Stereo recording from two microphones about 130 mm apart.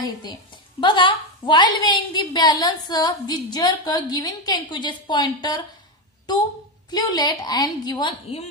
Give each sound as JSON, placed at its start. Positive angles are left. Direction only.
{"t": 0.0, "sound": "a woman's voice", "side_deg": 35}
{"t": 6.9, "sound": "a woman's voice", "side_deg": 30}